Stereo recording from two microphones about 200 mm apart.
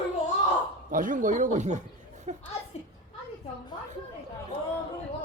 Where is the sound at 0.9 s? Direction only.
40° right (ahead or behind).